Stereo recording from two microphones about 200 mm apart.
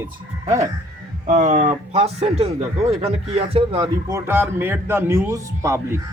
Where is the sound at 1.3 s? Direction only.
35° right (ahead or behind).